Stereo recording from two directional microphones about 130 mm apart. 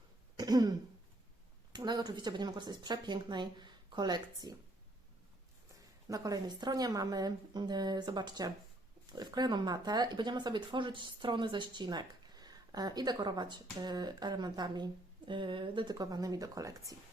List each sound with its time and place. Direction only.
0.3 s throat clearing: 30° right (ahead or behind)
1.7 s speech: 35° right (ahead or behind)
6.1 s speech: 30° right (ahead or behind)